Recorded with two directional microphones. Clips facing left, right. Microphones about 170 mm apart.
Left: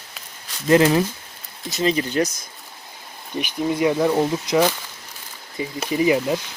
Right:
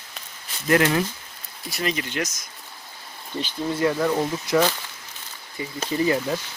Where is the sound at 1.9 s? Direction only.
35° left (ahead or behind).